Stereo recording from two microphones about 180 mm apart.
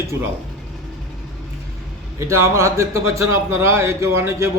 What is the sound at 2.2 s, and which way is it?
A man's voice, 15° right (ahead or behind).